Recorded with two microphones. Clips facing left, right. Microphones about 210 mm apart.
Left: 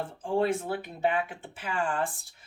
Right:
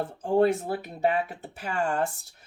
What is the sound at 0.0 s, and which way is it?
Speech, 40° right (ahead or behind).